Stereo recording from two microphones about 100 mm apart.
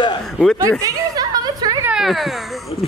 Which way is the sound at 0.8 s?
40° right (ahead or behind).